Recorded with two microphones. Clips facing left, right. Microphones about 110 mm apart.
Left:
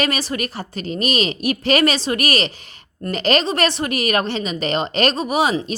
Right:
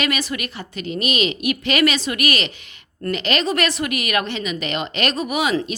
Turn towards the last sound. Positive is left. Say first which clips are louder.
# left 3 dB
turn(degrees=30)  # may be behind; listen again after turning